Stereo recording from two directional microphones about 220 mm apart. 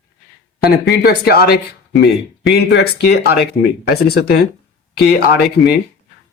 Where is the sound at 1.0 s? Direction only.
45° left (ahead or behind).